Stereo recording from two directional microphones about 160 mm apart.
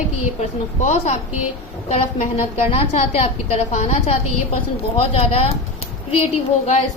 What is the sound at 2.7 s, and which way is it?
A woman's voice, 40° left (ahead or behind).